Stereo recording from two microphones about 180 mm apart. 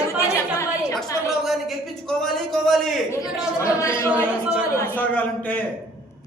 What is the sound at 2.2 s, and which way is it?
Speech, centre (ahead or behind).